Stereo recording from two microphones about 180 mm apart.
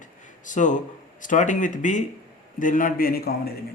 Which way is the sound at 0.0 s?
45° left (ahead or behind).